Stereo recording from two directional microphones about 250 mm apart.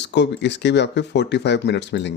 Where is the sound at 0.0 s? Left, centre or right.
Left.